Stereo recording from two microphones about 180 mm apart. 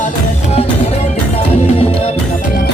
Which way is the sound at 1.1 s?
35° left (ahead or behind).